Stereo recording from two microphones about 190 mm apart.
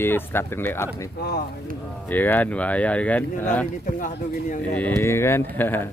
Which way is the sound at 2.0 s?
10° left (ahead or behind).